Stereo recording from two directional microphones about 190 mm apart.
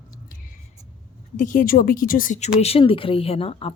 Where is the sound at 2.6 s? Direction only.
30° left (ahead or behind).